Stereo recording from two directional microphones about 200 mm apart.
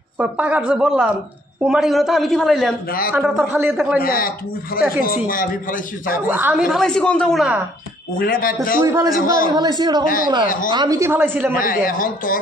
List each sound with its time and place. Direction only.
0.2 s a man's voice: 5° right (ahead or behind)
4.0 s speech: 45° left (ahead or behind)
6.3 s a man's voice: 10° right (ahead or behind)
6.7 s a man's voice: centre (ahead or behind)
8.2 s speech: 45° left (ahead or behind)
8.8 s a man's voice: 15° right (ahead or behind)
10.0 s speech: 45° left (ahead or behind)
10.7 s a man's voice: 20° right (ahead or behind)
11.5 s speech: 45° left (ahead or behind)